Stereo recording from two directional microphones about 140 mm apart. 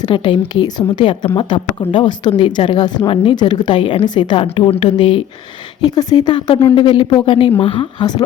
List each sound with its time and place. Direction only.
0.0 s a woman's voice: 35° left (ahead or behind)
5.8 s a woman's voice: 25° left (ahead or behind)